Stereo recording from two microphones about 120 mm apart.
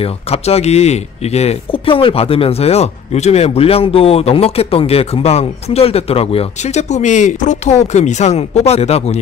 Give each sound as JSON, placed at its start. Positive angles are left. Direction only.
{"t": 0.0, "sound": "speech", "side_deg": 60}